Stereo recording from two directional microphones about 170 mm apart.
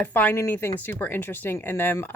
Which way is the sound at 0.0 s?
10° left (ahead or behind).